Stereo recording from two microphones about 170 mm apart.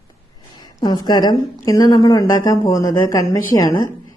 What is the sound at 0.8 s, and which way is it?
A woman's voice, 25° left (ahead or behind).